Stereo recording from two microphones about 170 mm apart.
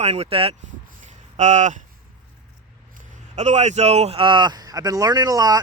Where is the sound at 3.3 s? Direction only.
40° right (ahead or behind); by 5.6 s 20° right (ahead or behind).